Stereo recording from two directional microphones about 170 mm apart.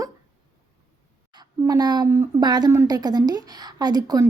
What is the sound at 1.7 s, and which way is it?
A woman's voice, 25° right (ahead or behind).